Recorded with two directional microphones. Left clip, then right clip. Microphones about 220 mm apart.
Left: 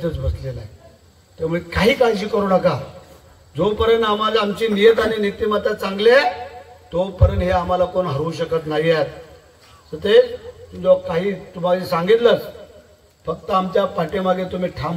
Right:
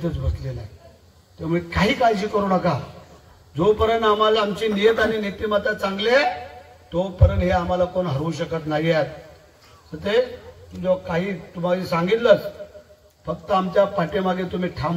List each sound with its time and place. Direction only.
1.5 s a man's voice: 25° left (ahead or behind)
10.8 s a man's voice: 25° left (ahead or behind)